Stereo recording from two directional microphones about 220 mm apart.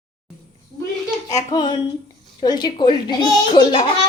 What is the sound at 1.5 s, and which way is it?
A woman's voice, 20° left (ahead or behind).